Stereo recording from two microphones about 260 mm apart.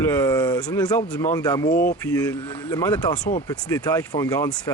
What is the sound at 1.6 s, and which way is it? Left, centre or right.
Speech, left.